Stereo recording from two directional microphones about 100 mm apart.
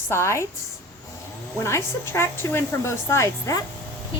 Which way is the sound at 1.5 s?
25° left (ahead or behind).